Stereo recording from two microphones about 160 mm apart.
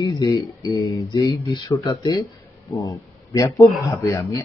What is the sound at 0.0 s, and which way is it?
Speech, 25° left (ahead or behind).